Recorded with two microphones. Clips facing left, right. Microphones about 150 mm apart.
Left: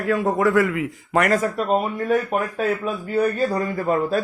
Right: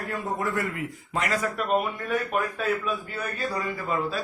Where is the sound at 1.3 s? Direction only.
40° left (ahead or behind).